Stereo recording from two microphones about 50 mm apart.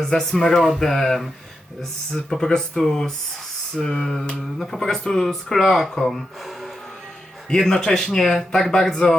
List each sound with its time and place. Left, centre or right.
0.0 s speech: centre
7.5 s speech: centre